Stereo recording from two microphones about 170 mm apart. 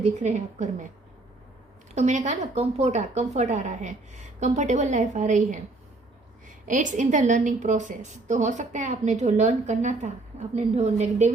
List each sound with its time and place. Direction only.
0.0 s a woman's voice: 45° right (ahead or behind)
2.0 s a woman's voice: 45° right (ahead or behind)
6.7 s a woman's voice: 45° right (ahead or behind)